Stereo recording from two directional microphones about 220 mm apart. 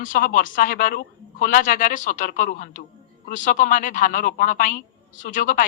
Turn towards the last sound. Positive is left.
turn(degrees=35)  # may be behind; listen again after turning